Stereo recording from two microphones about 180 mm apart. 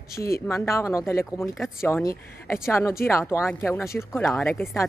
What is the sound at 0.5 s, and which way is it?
A woman's voice, 15° left (ahead or behind).